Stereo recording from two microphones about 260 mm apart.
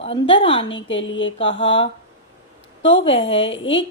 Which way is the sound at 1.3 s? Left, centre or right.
Left.